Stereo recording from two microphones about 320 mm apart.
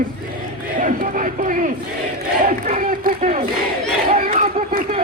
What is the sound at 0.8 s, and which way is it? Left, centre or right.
Speech, right.